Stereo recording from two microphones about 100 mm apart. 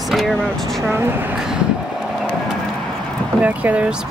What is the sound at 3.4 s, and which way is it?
Speech, 15° right (ahead or behind).